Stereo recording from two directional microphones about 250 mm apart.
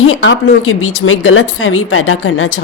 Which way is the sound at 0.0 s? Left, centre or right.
Left.